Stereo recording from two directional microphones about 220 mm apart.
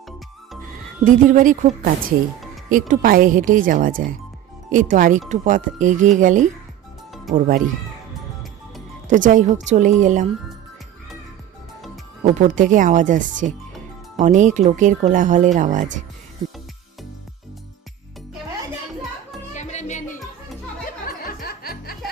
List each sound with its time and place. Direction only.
1.0 s a woman's voice: 35° right (ahead or behind)
9.0 s a woman's voice: 35° right (ahead or behind)
12.2 s a woman's voice: 35° right (ahead or behind)
19.5 s music: 30° left (ahead or behind)